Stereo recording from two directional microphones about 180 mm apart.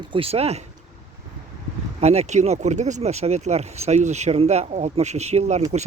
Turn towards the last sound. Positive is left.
turn(degrees=-35)  # may be behind; listen again after turning